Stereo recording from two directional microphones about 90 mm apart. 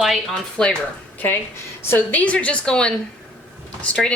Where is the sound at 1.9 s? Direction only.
20° left (ahead or behind).